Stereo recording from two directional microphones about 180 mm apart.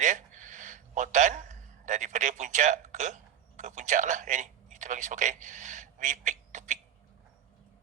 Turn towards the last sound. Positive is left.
turn(degrees=-45)  # may be behind; listen again after turning